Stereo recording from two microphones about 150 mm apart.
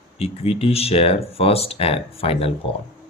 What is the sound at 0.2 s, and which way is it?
Speech, 40° left (ahead or behind).